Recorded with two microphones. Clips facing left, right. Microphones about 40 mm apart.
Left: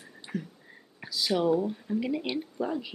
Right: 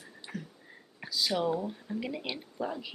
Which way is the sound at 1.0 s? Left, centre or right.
Centre.